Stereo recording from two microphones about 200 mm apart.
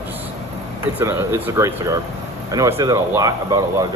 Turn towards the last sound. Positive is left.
turn(degrees=-20)  # may be behind; listen again after turning